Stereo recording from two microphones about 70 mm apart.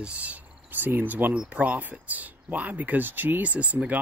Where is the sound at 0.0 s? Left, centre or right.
Centre.